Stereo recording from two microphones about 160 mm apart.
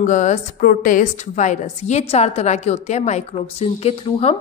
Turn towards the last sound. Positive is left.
turn(degrees=40)  # may be behind; listen again after turning